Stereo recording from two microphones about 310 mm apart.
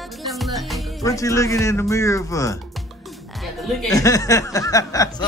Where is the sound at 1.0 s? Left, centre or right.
Centre.